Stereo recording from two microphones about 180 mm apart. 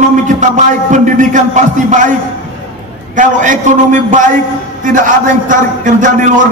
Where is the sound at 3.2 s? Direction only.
45° right (ahead or behind).